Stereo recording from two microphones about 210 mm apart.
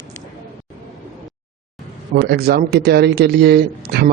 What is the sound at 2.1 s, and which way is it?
Speech, 50° right (ahead or behind).